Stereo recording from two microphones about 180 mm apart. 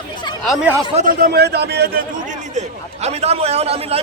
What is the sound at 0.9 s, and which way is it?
A man's voice, 50° right (ahead or behind).